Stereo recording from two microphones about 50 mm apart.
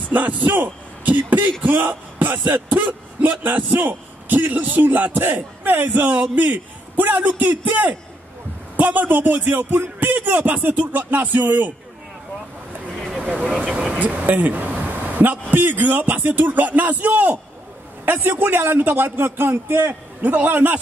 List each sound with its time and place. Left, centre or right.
0.1 s a man's voice: right
1.8 s a sound: right
2.7 s a man's voice: right
12.8 s vehicle: centre
13.9 s a man's voice: right
20.2 s a man's voice: right